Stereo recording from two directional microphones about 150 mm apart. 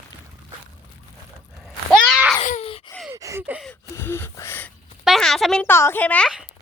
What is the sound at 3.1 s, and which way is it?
Gasp, 20° right (ahead or behind).